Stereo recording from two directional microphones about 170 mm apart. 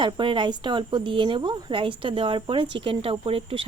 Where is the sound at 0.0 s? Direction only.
30° right (ahead or behind).